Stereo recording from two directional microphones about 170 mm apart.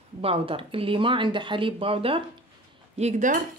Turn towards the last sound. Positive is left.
turn(degrees=-45)  # may be behind; listen again after turning